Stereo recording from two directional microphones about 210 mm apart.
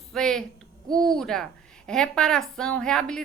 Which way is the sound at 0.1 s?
Centre (ahead or behind).